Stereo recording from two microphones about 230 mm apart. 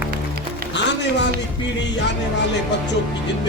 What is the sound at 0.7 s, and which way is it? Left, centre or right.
Speech, left.